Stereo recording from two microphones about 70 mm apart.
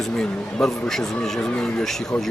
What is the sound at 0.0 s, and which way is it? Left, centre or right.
Speech, centre.